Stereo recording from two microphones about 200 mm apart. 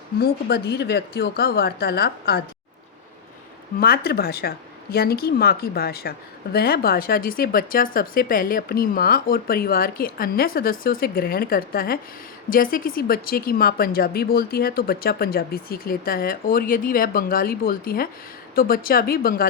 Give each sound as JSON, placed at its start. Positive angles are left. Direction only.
{"t": 0.2, "sound": "speech", "side_deg": 55}
{"t": 3.8, "sound": "speech", "side_deg": 50}